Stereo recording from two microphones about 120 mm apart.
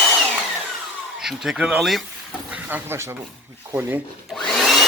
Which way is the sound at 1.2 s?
5° right (ahead or behind).